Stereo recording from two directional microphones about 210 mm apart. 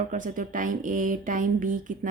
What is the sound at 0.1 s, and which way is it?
A woman's voice, 40° right (ahead or behind).